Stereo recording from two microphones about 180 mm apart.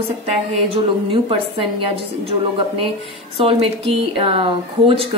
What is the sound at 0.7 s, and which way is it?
A woman's voice, 30° right (ahead or behind).